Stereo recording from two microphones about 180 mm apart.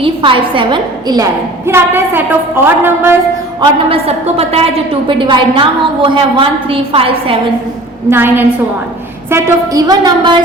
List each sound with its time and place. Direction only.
0.0 s a woman's voice: 30° right (ahead or behind); by 3.2 s 10° right (ahead or behind)
3.6 s a woman's voice: 30° right (ahead or behind)
8.1 s a woman's voice: 10° right (ahead or behind)